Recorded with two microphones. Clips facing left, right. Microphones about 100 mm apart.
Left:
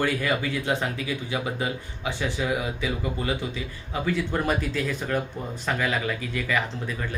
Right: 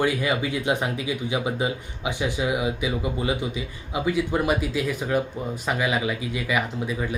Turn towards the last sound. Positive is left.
turn(degrees=-10)  # may be behind; listen again after turning